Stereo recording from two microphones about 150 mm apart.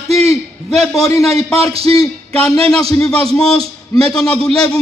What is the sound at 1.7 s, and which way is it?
Speech, 40° right (ahead or behind).